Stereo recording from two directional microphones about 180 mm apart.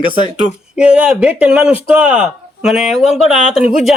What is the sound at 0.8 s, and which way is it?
Speech, 5° right (ahead or behind).